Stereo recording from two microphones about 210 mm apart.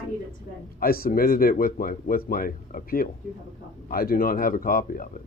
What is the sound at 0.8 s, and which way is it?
Speech, 45° left (ahead or behind).